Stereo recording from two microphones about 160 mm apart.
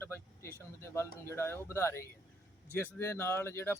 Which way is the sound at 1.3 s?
15° left (ahead or behind).